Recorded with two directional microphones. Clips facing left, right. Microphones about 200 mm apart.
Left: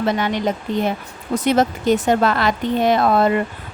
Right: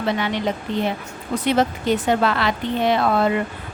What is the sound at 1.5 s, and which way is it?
Speech, 45° left (ahead or behind).